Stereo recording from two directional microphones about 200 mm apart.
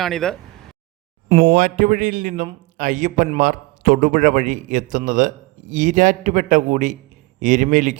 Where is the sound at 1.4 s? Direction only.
40° right (ahead or behind).